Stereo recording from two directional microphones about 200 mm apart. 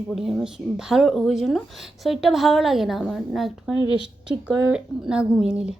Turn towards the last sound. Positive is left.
turn(degrees=-5)  # may be behind; listen again after turning